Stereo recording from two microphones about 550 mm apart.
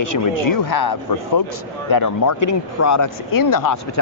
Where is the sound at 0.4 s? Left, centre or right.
Left.